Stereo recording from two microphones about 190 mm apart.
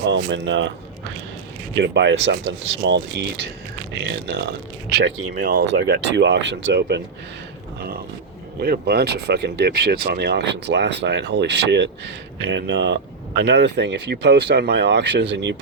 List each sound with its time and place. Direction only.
0.1 s speech: 70° right (ahead or behind)
8.6 s speech: 55° right (ahead or behind)